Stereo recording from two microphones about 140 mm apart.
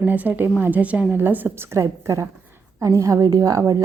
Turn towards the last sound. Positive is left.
turn(degrees=-25)  # may be behind; listen again after turning